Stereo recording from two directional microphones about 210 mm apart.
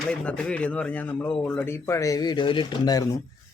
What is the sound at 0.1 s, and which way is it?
Speech, 5° left (ahead or behind).